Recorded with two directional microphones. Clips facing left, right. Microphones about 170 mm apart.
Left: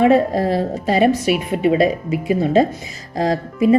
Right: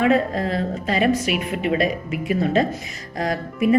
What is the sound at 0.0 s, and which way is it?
A woman's voice, 35° left (ahead or behind).